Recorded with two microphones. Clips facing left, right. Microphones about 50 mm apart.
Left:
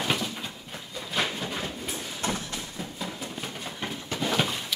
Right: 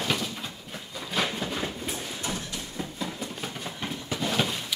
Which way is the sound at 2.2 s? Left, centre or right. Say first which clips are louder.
Left 5 dB; left.